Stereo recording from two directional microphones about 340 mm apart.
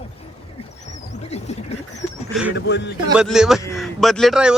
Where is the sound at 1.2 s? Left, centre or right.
Centre.